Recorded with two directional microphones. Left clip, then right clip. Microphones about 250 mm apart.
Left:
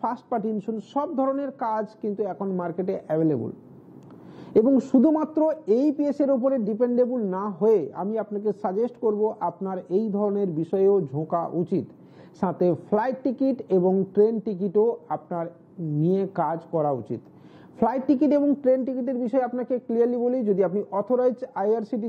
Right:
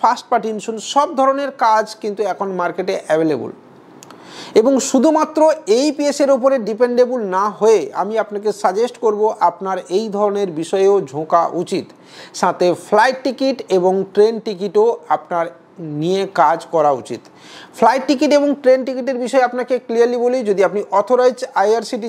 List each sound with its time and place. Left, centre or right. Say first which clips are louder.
0.0 s a woman's voice: right 12 dB; centre
4.4 s a woman's voice: right 7 dB; centre
9.0 s a woman's voice: right 11 dB; centre
11.1 s speech: right 8 dB; right
11.7 s a woman's voice: right 6 dB; centre